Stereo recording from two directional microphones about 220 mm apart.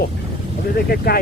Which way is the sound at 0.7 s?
45° left (ahead or behind).